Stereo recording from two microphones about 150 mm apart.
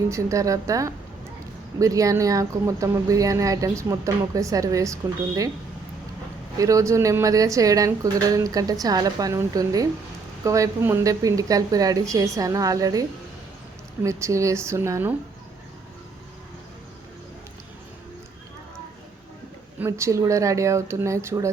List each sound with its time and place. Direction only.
0.1 s speech: 20° right (ahead or behind)
6.6 s speech: 20° right (ahead or behind)
19.8 s speech: 20° right (ahead or behind)